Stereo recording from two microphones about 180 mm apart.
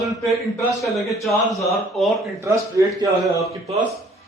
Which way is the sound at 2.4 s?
15° right (ahead or behind).